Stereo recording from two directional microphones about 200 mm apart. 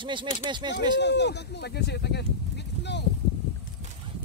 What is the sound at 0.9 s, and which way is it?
Speech, 60° left (ahead or behind).